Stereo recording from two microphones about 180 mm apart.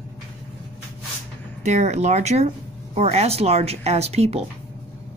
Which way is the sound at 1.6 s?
40° right (ahead or behind).